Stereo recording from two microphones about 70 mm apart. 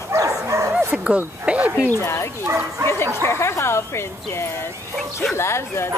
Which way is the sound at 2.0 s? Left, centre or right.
Left.